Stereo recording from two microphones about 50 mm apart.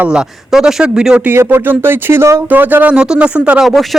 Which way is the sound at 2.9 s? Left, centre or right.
Centre.